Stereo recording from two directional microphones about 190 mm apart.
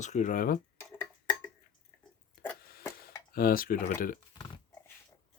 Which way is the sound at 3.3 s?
50° left (ahead or behind).